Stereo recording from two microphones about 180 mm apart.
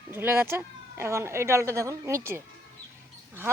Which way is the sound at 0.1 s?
10° right (ahead or behind).